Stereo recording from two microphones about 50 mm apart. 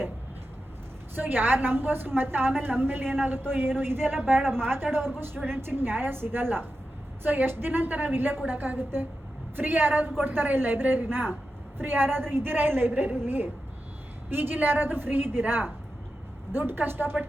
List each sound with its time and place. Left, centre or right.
1.1 s a woman's voice: right